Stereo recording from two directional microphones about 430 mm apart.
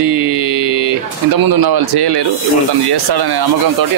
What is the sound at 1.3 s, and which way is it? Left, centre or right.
A man's voice, right.